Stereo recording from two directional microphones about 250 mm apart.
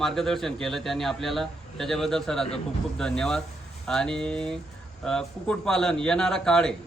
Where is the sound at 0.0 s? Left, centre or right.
Centre.